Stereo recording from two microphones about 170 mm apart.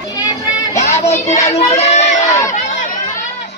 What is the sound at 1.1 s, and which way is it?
Speech, 40° left (ahead or behind).